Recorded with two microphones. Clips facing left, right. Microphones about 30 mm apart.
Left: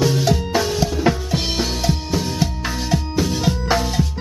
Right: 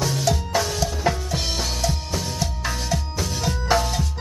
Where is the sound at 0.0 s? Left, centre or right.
Centre.